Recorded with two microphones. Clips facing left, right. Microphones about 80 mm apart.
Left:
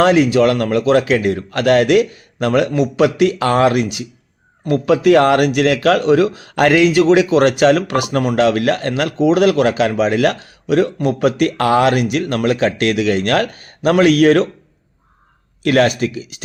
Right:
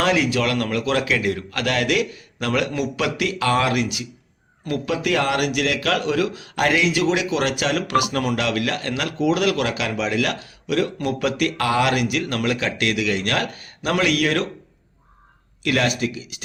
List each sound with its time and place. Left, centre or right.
0.0 s a man's voice: left
4.9 s a man's voice: left
15.6 s a man's voice: left